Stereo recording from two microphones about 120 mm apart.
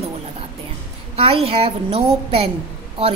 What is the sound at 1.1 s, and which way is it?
A woman's voice, 55° right (ahead or behind).